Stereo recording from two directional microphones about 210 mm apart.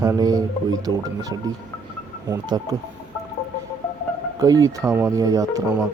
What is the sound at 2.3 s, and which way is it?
Speech, 20° right (ahead or behind).